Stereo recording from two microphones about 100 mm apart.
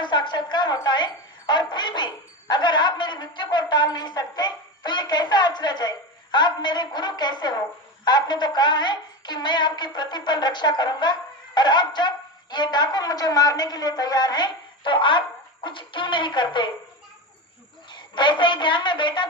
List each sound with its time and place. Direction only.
0.0 s a sound: 50° left (ahead or behind)
2.5 s a woman's voice: 50° left (ahead or behind)
17.8 s a woman's voice: 50° left (ahead or behind)